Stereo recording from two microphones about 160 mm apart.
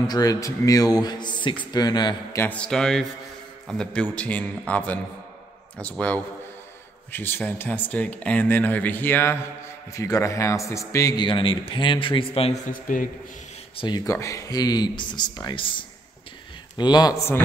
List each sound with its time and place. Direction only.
0.0 s speech: 25° left (ahead or behind)
2.4 s speech: 5° left (ahead or behind); by 12.5 s 35° left (ahead or behind)
12.7 s a man's voice: 55° left (ahead or behind)
13.7 s speech: 25° left (ahead or behind)